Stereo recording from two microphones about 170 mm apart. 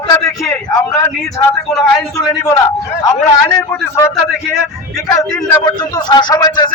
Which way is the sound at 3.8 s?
15° left (ahead or behind).